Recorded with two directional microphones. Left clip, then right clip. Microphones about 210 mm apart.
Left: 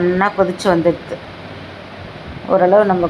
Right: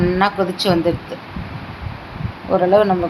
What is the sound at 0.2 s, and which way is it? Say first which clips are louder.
Speech: left 2 dB; 15° left (ahead or behind).